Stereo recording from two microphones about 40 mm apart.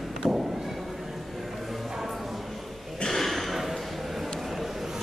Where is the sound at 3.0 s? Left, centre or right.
Centre.